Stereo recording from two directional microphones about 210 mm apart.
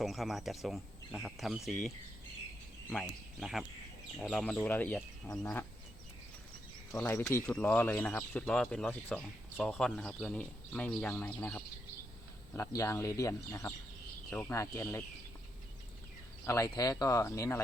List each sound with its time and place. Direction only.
0.0 s speech: centre (ahead or behind)
2.9 s speech: centre (ahead or behind)
6.9 s speech: 15° left (ahead or behind)
16.5 s speech: 15° left (ahead or behind)